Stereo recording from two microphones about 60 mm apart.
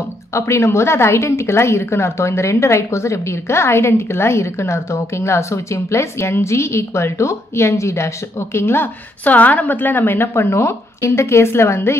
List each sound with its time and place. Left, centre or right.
0.3 s a woman's voice: left
8.5 s a woman's voice: left
9.2 s a woman's voice: left